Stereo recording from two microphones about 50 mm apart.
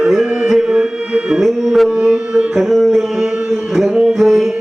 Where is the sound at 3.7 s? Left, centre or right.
Centre.